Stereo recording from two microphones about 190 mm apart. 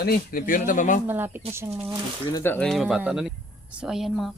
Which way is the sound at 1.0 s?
10° right (ahead or behind).